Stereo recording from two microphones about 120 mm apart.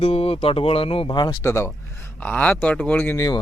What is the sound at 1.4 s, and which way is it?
Speech, 20° left (ahead or behind).